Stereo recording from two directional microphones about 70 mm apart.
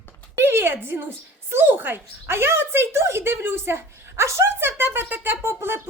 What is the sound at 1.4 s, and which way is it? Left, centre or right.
Speech, right.